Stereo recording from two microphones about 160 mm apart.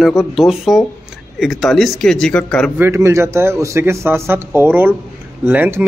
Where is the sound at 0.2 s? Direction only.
Centre (ahead or behind).